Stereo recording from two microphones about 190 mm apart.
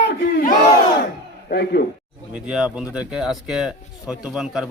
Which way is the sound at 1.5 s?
60° left (ahead or behind).